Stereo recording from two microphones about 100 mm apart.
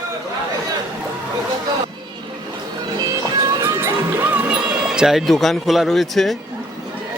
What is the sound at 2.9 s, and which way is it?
Music, 40° right (ahead or behind).